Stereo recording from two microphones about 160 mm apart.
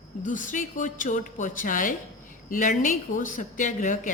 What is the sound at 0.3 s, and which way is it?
A woman's voice, 55° left (ahead or behind).